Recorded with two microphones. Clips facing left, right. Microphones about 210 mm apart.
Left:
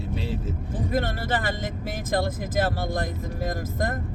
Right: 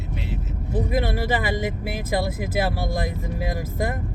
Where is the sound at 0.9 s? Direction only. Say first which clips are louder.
Right 1 dB; 10° right (ahead or behind).